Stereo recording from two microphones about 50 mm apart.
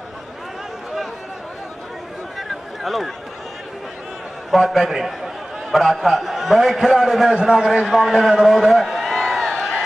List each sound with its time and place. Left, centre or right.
2.3 s a sound: centre
4.5 s a man's voice: centre
7.9 s a man's voice: centre
9.5 s crowd: centre